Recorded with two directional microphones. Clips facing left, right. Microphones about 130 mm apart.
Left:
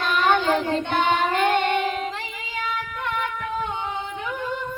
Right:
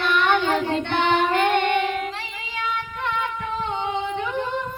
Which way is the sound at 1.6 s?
40° left (ahead or behind).